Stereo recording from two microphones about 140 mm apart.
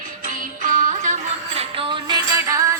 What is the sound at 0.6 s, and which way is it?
Music, 65° right (ahead or behind).